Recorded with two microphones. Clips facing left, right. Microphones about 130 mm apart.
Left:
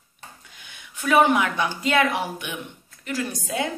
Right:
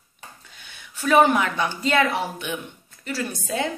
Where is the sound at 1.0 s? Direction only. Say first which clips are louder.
Right 1 dB; 15° left (ahead or behind).